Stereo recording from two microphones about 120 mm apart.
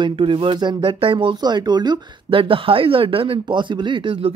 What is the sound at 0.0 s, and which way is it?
Speech, 45° right (ahead or behind).